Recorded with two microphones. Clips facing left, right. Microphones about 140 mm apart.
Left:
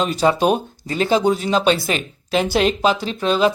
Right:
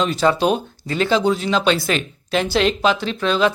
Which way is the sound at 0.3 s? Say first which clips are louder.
Left 1 dB; 45° left (ahead or behind).